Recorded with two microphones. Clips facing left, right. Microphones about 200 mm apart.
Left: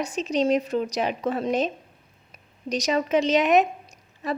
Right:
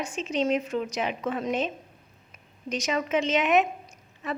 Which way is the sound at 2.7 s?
35° left (ahead or behind).